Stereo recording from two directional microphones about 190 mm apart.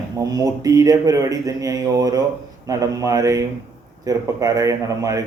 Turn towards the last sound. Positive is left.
turn(degrees=-15)  # may be behind; listen again after turning